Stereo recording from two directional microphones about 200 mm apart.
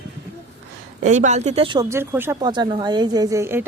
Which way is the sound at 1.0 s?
35° right (ahead or behind).